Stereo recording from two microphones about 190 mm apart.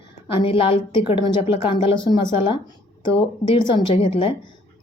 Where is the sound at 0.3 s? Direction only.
30° left (ahead or behind).